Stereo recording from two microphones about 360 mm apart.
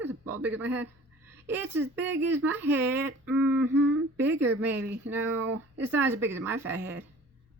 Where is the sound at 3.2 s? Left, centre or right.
Centre.